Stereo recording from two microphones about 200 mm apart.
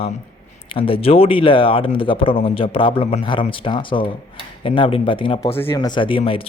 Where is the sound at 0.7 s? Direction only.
25° left (ahead or behind).